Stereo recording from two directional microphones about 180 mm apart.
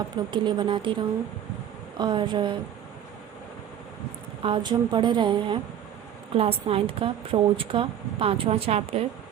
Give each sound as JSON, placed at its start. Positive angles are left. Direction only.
{"t": 0.3, "sound": "a woman's voice", "side_deg": -25}
{"t": 2.0, "sound": "a woman's voice", "side_deg": -25}
{"t": 4.4, "sound": "a woman's voice", "side_deg": -25}